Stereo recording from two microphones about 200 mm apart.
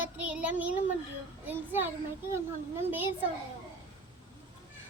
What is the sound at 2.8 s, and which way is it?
Speech, 10° right (ahead or behind).